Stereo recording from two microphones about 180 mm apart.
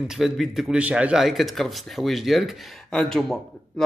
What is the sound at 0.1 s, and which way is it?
A man's voice, centre (ahead or behind).